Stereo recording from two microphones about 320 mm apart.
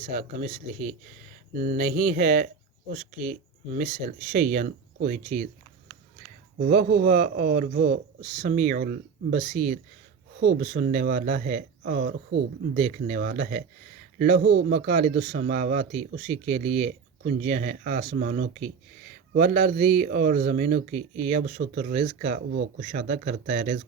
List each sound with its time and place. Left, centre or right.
0.1 s speech: right
6.6 s speech: right